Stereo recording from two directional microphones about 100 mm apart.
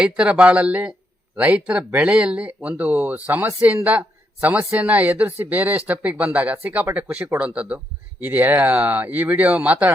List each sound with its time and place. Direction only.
0.0 s speech: 10° right (ahead or behind)